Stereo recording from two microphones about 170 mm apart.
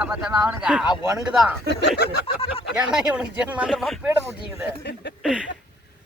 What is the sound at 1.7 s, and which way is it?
Speech, 90° left.